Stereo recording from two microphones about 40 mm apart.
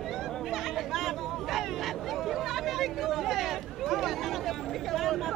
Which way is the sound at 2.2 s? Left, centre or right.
Centre.